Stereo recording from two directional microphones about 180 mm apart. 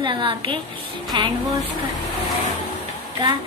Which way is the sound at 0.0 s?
25° right (ahead or behind).